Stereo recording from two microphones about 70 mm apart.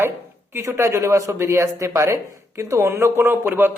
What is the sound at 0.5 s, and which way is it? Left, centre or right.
Speech, right.